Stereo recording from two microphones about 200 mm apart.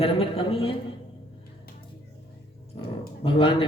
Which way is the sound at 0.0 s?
30° left (ahead or behind).